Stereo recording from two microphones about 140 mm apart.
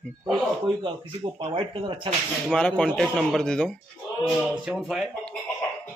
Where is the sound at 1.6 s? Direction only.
35° right (ahead or behind).